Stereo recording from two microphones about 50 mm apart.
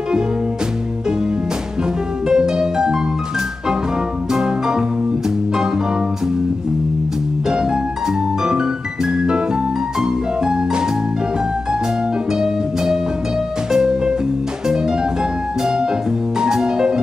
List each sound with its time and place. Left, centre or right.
2.2 s music: centre
4.3 s music: centre
7.4 s music: centre
12.4 s music: centre
15.6 s music: centre